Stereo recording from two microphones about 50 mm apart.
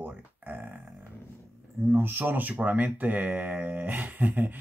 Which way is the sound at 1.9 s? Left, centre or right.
Right.